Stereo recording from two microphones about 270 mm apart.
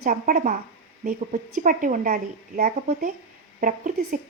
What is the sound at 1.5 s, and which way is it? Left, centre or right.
A woman's voice, right.